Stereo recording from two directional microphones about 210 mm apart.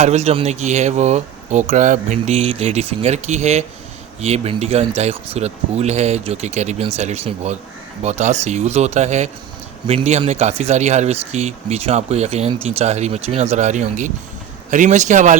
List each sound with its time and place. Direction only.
0.0 s speech: 30° right (ahead or behind)